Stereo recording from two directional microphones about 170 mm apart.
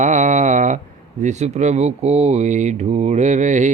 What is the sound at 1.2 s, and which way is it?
Speech, 40° right (ahead or behind).